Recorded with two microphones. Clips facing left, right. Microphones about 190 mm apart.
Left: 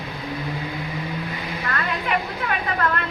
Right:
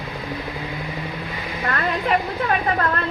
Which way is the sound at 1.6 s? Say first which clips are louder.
Right 5 dB; 35° right (ahead or behind).